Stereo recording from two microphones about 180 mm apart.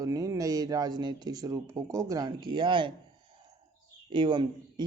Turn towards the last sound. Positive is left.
turn(degrees=-25)  # may be behind; listen again after turning